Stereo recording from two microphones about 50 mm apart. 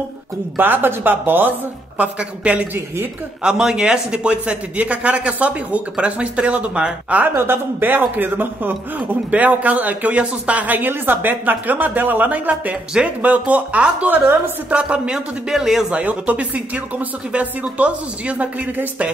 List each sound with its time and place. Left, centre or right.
0.6 s a man's voice: right
2.0 s speech: right
7.3 s a man's voice: right
8.2 s a man's voice: right; by 15.9 s centre
15.9 s speech: right